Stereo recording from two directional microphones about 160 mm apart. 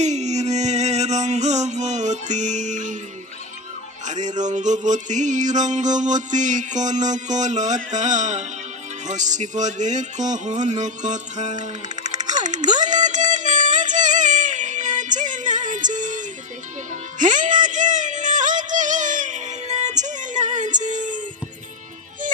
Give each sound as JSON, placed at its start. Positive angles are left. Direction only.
{"t": 0.0, "sound": "music", "side_deg": -45}
{"t": 4.0, "sound": "music", "side_deg": -50}